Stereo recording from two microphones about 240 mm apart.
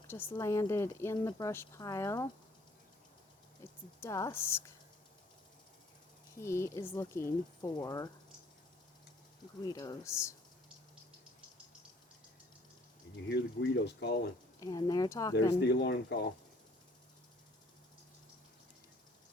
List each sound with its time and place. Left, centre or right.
0.3 s speech: centre
3.6 s speech: centre
6.3 s speech: centre
9.6 s speech: centre
13.2 s speech: left
14.6 s speech: centre
15.6 s speech: left